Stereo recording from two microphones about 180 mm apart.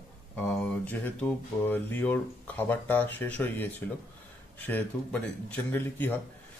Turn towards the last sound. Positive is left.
turn(degrees=10)  # may be behind; listen again after turning